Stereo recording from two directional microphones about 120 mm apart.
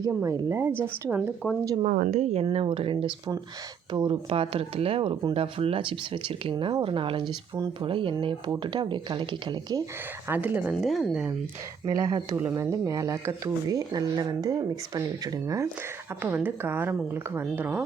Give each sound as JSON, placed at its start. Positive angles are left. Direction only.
{"t": 0.1, "sound": "speech", "side_deg": -20}
{"t": 1.8, "sound": "speech", "side_deg": -85}
{"t": 2.4, "sound": "speech", "side_deg": -50}
{"t": 7.5, "sound": "speech", "side_deg": -30}
{"t": 7.9, "sound": "speech", "side_deg": -45}
{"t": 10.2, "sound": "speech", "side_deg": -15}
{"t": 10.8, "sound": "speech", "side_deg": 0}
{"t": 11.9, "sound": "speech", "side_deg": -30}
{"t": 16.2, "sound": "speech", "side_deg": -15}